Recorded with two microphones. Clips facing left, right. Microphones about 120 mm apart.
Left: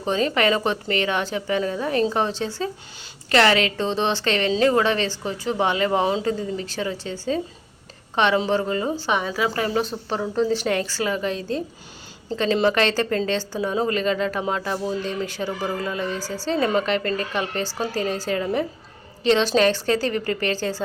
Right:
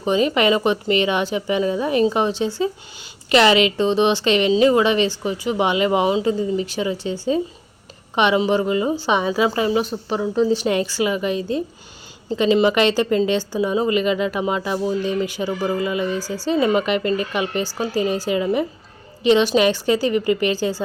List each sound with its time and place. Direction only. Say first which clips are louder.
0.0 s a woman's voice: right 3 dB; 15° right (ahead or behind)